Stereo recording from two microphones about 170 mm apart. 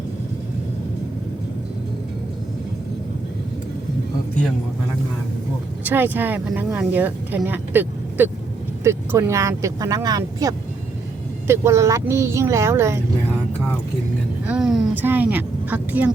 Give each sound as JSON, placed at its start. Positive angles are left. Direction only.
{"t": 5.8, "sound": "speech", "side_deg": -10}
{"t": 14.4, "sound": "speech", "side_deg": -5}